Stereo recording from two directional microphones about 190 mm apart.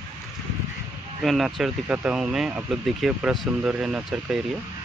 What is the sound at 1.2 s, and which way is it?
Speech, centre (ahead or behind).